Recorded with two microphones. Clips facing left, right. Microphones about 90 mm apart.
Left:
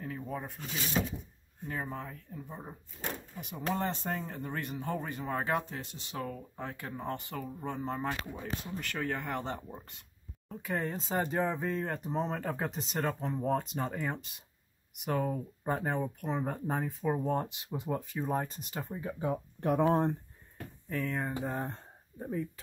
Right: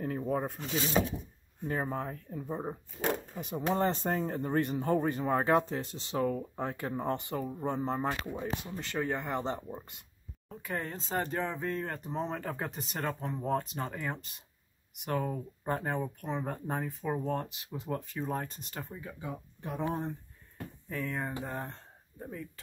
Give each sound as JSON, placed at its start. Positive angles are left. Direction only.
{"t": 0.0, "sound": "a sound", "side_deg": -45}
{"t": 1.7, "sound": "speech", "side_deg": -40}
{"t": 7.2, "sound": "speech", "side_deg": -20}
{"t": 7.5, "sound": "speech", "side_deg": -30}
{"t": 10.5, "sound": "speech", "side_deg": 0}
{"t": 17.3, "sound": "speech", "side_deg": 20}
{"t": 17.8, "sound": "speech", "side_deg": 5}
{"t": 19.0, "sound": "speech", "side_deg": 40}
{"t": 19.9, "sound": "speech", "side_deg": 60}
{"t": 20.9, "sound": "speech", "side_deg": 0}